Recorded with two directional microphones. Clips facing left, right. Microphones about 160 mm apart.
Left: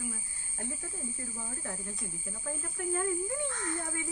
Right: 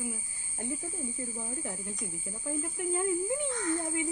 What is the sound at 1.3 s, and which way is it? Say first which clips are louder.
Speech: right 3 dB; 15° right (ahead or behind).